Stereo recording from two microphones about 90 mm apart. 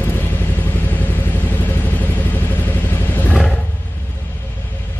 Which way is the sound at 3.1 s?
15° left (ahead or behind).